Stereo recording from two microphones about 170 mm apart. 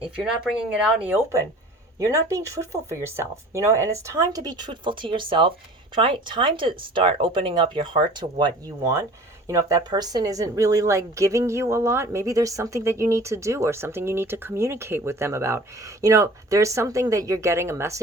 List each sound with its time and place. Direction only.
0.2 s speech: 5° right (ahead or behind); by 7.9 s 30° right (ahead or behind)
9.5 s speech: 20° right (ahead or behind)